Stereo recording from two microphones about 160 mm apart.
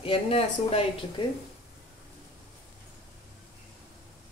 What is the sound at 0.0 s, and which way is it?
Speech, 35° left (ahead or behind).